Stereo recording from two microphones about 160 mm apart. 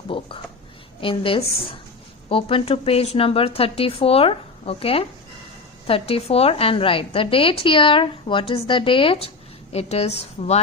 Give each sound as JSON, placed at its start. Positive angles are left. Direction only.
{"t": 0.1, "sound": "a woman's voice", "side_deg": 35}